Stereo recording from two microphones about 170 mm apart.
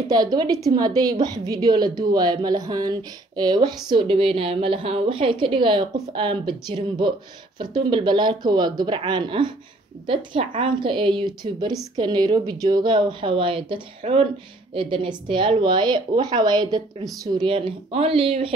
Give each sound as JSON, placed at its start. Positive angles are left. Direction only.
{"t": 0.1, "sound": "a woman's voice", "side_deg": -25}